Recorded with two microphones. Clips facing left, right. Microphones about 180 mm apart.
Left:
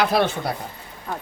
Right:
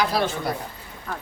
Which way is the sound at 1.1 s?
20° left (ahead or behind).